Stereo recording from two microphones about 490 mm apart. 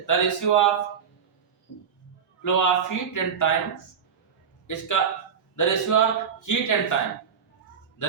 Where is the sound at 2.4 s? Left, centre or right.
Left.